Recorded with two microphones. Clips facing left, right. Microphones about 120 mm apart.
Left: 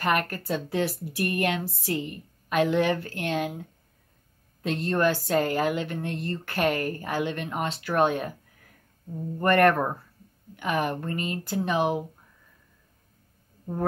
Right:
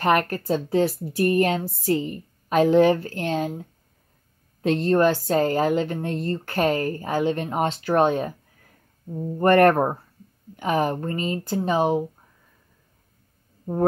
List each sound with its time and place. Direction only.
0.0 s a woman's voice: 45° right (ahead or behind)
4.6 s a woman's voice: 45° right (ahead or behind)
9.4 s a woman's voice: 45° right (ahead or behind)